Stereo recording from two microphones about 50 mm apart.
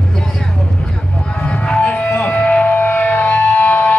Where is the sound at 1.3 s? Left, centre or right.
Left.